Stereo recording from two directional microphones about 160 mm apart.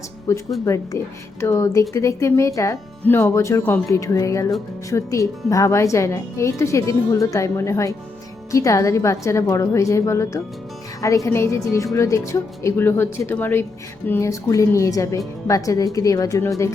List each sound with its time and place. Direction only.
0.3 s speech: 20° left (ahead or behind)